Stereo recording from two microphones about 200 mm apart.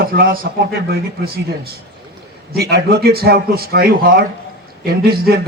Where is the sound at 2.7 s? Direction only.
55° right (ahead or behind).